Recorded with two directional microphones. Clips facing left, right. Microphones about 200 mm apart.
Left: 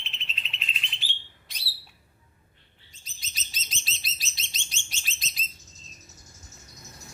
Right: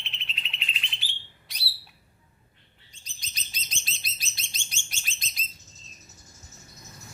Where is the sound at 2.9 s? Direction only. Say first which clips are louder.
Even; 5° left (ahead or behind).